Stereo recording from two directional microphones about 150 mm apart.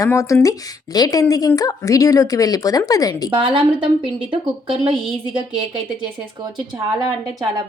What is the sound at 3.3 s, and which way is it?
A woman's voice, 35° right (ahead or behind).